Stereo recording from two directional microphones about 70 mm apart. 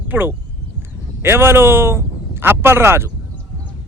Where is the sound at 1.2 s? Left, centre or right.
Right.